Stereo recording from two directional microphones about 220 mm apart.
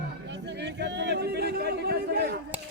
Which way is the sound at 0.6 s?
50° right (ahead or behind).